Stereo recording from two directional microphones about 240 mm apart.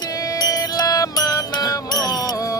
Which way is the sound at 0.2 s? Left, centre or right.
Centre.